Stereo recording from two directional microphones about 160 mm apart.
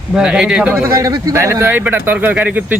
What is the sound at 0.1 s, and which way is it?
Speech, 5° right (ahead or behind).